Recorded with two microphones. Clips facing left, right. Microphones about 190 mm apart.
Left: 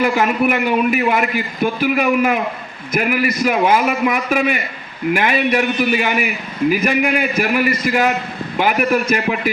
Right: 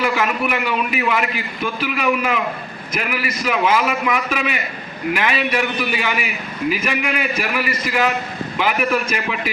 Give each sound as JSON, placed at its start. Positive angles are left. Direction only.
{"t": 0.0, "sound": "a man's voice", "side_deg": 45}